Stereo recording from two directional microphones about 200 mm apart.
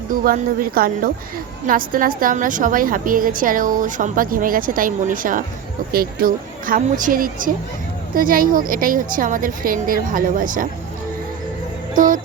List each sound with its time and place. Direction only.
0.1 s a woman's voice: 45° right (ahead or behind)
11.9 s music: 40° right (ahead or behind)